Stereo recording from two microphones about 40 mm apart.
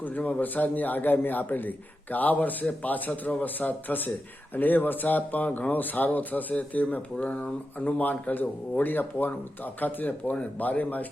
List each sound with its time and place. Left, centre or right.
0.0 s a man's voice: left
5.7 s a man's voice: left
8.3 s a man's voice: left